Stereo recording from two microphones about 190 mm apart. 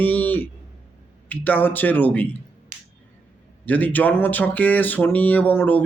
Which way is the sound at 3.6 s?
10° left (ahead or behind).